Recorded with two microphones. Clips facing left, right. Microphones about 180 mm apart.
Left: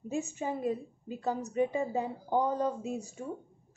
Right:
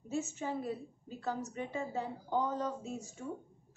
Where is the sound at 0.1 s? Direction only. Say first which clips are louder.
Left 2 dB; 15° left (ahead or behind).